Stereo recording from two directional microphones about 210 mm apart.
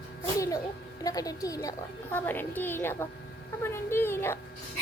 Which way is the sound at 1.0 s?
15° left (ahead or behind).